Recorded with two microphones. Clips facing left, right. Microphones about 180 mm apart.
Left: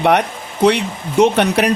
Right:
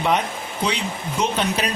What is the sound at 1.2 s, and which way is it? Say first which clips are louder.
Speech: left 10 dB; 70° left (ahead or behind).